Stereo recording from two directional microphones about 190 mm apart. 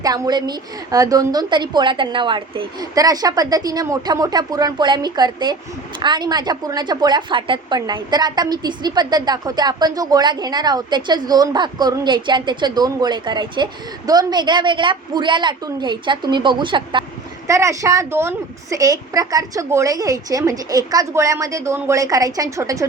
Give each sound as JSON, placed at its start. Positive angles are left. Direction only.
{"t": 0.0, "sound": "a woman's voice", "side_deg": -20}